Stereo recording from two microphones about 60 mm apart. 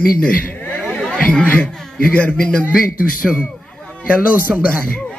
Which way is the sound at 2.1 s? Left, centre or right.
Left.